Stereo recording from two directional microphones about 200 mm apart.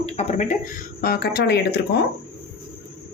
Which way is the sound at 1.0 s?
50° left (ahead or behind).